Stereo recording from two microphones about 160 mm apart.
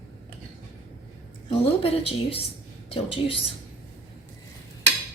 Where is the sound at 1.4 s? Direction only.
35° left (ahead or behind).